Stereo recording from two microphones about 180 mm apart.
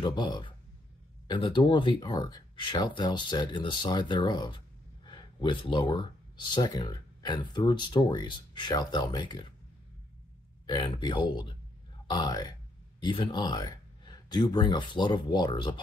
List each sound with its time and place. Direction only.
0.0 s speech: 25° left (ahead or behind)
10.7 s speech: 25° left (ahead or behind)